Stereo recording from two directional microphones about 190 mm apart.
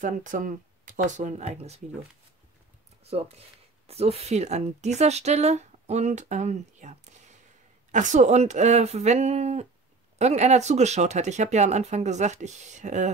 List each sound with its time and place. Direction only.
0.0 s speech: 45° right (ahead or behind)
3.0 s speech: 35° right (ahead or behind)